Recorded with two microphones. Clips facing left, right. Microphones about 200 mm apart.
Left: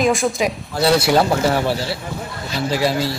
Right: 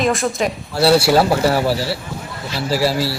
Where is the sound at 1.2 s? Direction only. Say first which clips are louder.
Right 1 dB; 35° right (ahead or behind).